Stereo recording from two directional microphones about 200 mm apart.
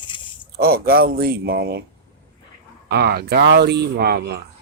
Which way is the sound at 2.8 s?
55° right (ahead or behind).